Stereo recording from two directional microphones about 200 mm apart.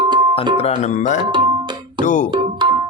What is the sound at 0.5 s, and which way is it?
Speech, 30° left (ahead or behind).